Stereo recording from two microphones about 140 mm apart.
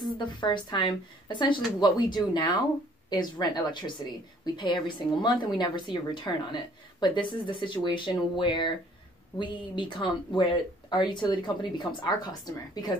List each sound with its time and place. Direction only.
0.0 s a woman's voice: 35° left (ahead or behind)